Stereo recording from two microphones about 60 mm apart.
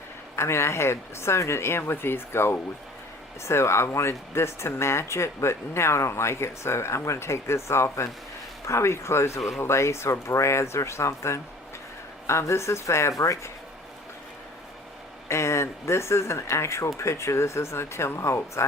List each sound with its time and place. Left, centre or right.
0.3 s speech: left
15.3 s speech: left